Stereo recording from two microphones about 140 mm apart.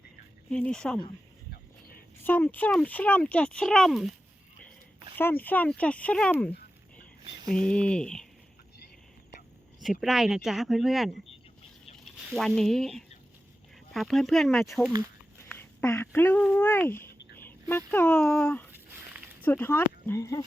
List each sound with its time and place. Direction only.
0.5 s speech: 10° left (ahead or behind)
2.2 s speech: 15° left (ahead or behind)
5.1 s speech: 15° left (ahead or behind)
7.4 s speech: 5° left (ahead or behind)
9.8 s speech: centre (ahead or behind)
12.3 s speech: centre (ahead or behind)
15.5 s speech: 20° left (ahead or behind)
18.7 s a sound: 10° right (ahead or behind)
19.4 s speech: 15° left (ahead or behind)